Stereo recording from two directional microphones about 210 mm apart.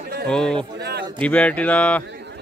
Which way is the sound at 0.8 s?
50° right (ahead or behind).